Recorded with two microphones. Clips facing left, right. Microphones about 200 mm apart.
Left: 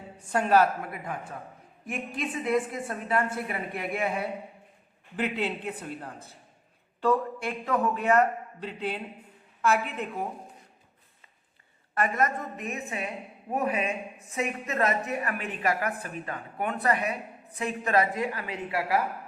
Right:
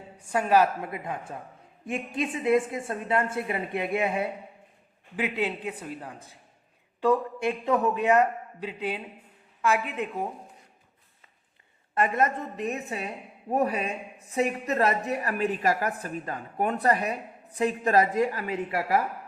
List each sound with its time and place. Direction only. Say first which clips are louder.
0.3 s a man's voice: even; 10° right (ahead or behind)
0.8 s a woman's voice: right 2 dB; 25° right (ahead or behind)
5.1 s a man's voice: right 1 dB; 10° right (ahead or behind)
11.9 s a woman's voice: right 2 dB; 25° right (ahead or behind); by 18.9 s 45° right (ahead or behind)